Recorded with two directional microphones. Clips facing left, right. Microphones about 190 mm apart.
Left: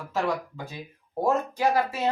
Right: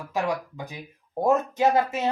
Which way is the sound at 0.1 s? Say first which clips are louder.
Even; 15° right (ahead or behind).